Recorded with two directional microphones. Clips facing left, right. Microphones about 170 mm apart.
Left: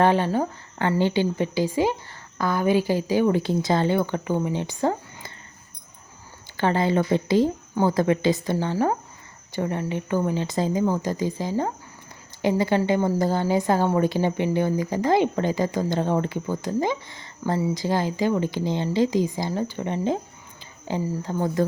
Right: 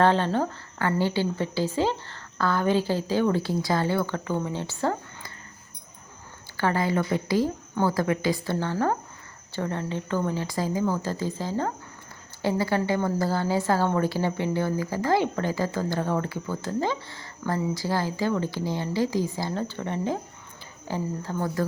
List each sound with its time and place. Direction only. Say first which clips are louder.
0.0 s a woman's voice: left 2 dB; 15° left (ahead or behind)
6.6 s a woman's voice: left 3 dB; 25° left (ahead or behind)
21.2 s a woman's voice: left 6 dB; 20° left (ahead or behind)